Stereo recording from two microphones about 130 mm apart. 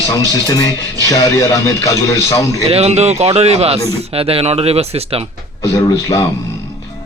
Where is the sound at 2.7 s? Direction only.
55° right (ahead or behind).